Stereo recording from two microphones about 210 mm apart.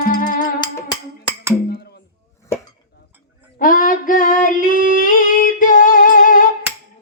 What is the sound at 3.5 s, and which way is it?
Female singing, 40° left (ahead or behind).